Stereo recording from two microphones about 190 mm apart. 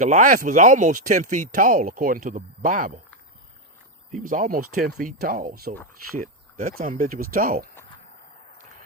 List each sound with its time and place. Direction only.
0.0 s speech: 45° right (ahead or behind)
4.2 s speech: 45° right (ahead or behind)